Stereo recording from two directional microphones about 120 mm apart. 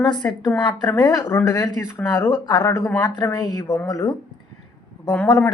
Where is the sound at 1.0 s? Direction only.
30° left (ahead or behind).